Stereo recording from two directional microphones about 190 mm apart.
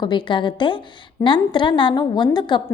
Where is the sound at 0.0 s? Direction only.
25° left (ahead or behind).